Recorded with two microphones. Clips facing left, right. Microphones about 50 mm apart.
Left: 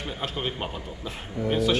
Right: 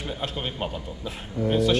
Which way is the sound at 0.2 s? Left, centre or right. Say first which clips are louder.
Left 1 dB; centre.